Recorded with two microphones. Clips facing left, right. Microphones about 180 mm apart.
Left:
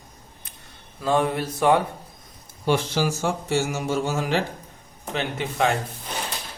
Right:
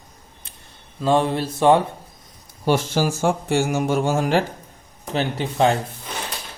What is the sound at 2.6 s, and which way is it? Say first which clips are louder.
A man's voice: right 3 dB; 45° right (ahead or behind).